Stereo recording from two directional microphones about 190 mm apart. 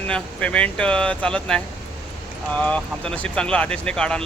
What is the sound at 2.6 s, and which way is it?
Speech, 5° left (ahead or behind).